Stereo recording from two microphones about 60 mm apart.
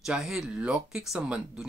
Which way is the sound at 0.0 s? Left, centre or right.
Centre.